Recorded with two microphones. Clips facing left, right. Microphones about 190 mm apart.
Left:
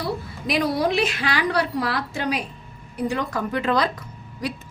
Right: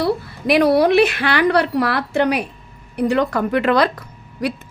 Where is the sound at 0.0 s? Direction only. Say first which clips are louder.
Right 8 dB; 65° right (ahead or behind).